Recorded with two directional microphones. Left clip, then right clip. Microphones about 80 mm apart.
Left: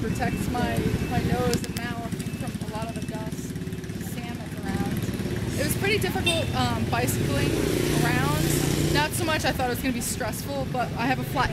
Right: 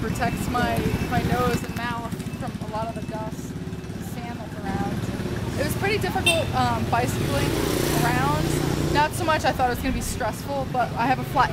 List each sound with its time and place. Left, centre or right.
0.2 s speech: right
5.6 s vehicle: centre
6.5 s speech: centre
7.7 s speech: right
8.0 s speech: centre